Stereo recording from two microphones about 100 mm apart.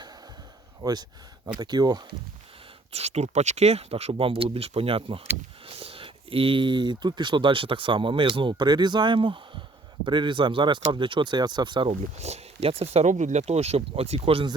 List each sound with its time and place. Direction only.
0.8 s speech: 40° right (ahead or behind)
2.9 s speech: 90° right; by 11.9 s 50° right (ahead or behind)
11.9 s speech: 90° right